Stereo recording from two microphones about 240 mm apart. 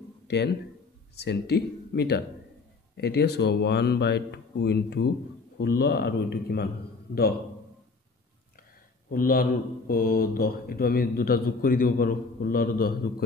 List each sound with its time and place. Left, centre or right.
1.2 s a man's voice: left
9.1 s speech: left